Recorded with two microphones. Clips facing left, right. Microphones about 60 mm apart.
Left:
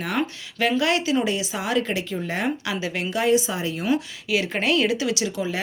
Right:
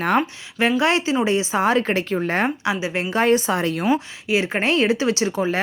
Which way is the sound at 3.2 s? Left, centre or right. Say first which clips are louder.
Right 3 dB; right.